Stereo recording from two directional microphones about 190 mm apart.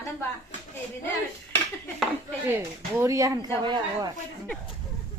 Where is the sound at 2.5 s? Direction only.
15° right (ahead or behind).